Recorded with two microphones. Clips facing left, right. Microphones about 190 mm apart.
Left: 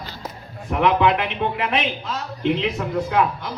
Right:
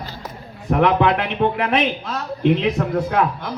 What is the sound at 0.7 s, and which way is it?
A man's voice, 50° right (ahead or behind).